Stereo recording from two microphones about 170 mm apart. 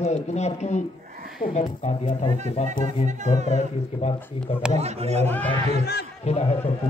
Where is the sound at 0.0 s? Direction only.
40° left (ahead or behind).